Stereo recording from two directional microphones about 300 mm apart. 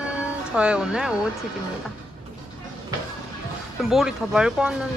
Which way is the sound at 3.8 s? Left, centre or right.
Centre.